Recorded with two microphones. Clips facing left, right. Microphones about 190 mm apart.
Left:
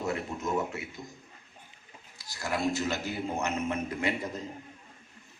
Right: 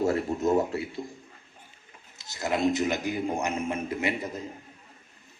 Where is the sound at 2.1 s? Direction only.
20° right (ahead or behind).